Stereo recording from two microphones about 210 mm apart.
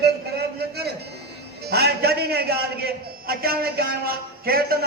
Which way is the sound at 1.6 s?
50° right (ahead or behind).